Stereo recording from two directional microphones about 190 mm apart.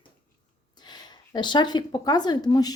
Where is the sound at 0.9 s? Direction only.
20° left (ahead or behind).